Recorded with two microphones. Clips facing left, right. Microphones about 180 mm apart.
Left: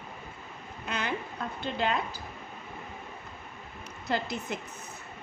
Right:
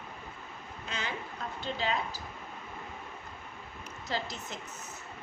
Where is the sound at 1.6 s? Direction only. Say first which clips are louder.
Left 4 dB; 60° left (ahead or behind).